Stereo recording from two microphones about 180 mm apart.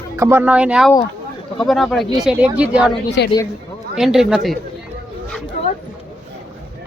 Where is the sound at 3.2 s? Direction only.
70° left (ahead or behind).